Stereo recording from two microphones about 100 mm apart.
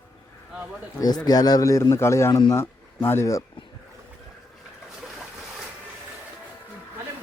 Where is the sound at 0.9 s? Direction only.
40° left (ahead or behind).